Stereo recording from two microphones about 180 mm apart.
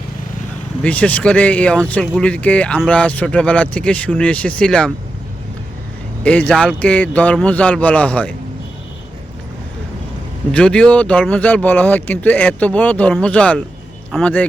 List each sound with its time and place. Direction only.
0.8 s speech: 10° left (ahead or behind)
6.2 s speech: 5° left (ahead or behind)
10.5 s speech: 5° left (ahead or behind)